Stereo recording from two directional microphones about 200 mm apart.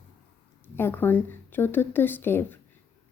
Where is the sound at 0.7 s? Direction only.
10° left (ahead or behind).